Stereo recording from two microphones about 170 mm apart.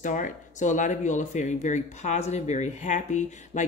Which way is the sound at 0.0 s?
50° left (ahead or behind).